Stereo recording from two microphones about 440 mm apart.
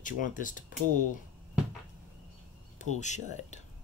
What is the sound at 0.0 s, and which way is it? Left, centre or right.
Speech, centre.